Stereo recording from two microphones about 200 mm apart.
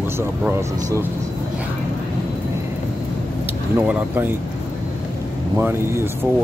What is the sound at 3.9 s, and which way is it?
Speech, 10° right (ahead or behind).